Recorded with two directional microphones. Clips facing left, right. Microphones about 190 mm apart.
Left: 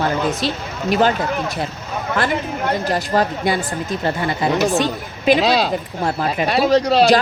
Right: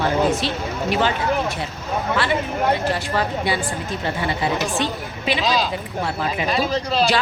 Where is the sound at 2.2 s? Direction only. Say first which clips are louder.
Left 3 dB; 45° left (ahead or behind).